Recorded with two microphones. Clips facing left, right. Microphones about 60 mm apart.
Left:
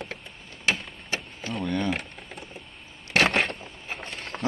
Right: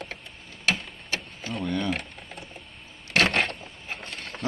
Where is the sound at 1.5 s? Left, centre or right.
Centre.